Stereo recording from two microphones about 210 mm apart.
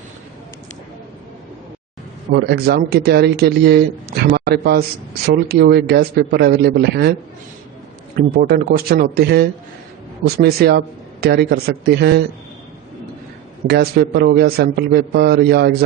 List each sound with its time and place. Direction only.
2.3 s speech: 50° right (ahead or behind)
8.1 s speech: 45° right (ahead or behind)
13.7 s speech: 50° right (ahead or behind)